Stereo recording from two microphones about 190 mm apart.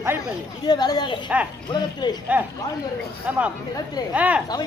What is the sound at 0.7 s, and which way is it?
Speech, 20° left (ahead or behind).